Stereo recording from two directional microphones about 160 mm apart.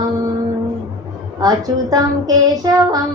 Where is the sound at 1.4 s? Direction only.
25° right (ahead or behind).